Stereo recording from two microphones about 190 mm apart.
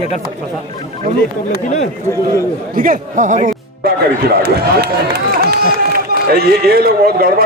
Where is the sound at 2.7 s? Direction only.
45° right (ahead or behind).